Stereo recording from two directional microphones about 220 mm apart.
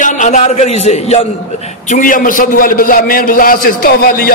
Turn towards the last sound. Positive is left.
turn(degrees=40)  # may be behind; listen again after turning